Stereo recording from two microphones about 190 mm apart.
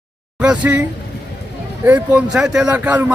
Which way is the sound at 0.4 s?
5° right (ahead or behind).